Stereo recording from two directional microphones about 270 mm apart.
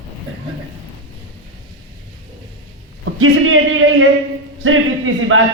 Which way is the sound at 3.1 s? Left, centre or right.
Right.